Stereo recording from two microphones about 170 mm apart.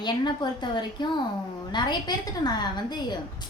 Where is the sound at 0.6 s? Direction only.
25° left (ahead or behind).